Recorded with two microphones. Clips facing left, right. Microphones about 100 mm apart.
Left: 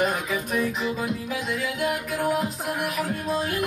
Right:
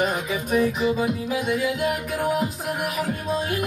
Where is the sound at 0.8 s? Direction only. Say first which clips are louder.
Right 5 dB; 15° right (ahead or behind).